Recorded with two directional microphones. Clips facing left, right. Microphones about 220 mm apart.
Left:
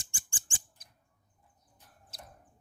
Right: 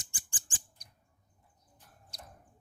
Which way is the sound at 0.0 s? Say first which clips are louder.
Even; 25° left (ahead or behind).